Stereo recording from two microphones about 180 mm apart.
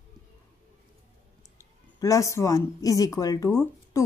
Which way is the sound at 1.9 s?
20° left (ahead or behind).